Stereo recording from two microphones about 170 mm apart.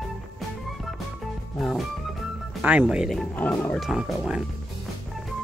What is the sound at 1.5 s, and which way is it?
Music, 5° left (ahead or behind).